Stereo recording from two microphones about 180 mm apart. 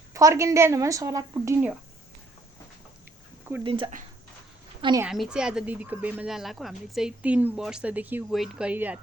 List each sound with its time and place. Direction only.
0.1 s speech: 15° right (ahead or behind)
3.6 s a woman's voice: 30° right (ahead or behind)
5.0 s speech: 5° right (ahead or behind)